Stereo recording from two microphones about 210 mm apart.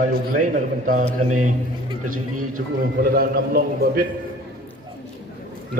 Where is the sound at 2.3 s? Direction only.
40° right (ahead or behind).